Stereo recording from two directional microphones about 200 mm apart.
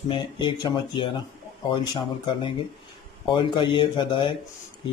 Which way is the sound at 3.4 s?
25° left (ahead or behind).